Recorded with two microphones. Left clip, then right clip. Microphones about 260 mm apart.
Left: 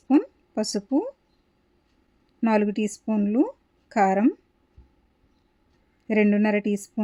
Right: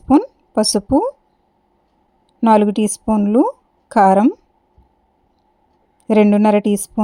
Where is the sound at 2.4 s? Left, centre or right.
Right.